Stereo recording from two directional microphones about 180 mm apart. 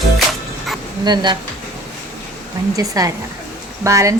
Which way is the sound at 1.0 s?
25° right (ahead or behind).